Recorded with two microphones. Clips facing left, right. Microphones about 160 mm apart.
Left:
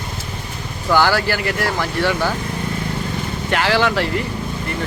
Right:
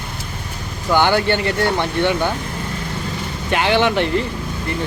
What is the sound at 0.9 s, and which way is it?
Speech, 20° right (ahead or behind).